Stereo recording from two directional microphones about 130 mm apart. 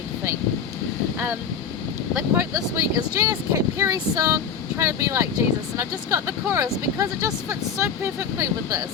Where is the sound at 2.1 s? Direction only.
20° right (ahead or behind).